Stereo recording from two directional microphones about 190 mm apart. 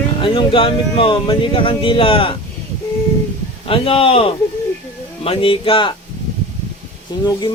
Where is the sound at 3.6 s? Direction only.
30° left (ahead or behind).